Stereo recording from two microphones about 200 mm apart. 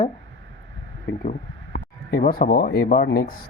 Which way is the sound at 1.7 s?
45° left (ahead or behind).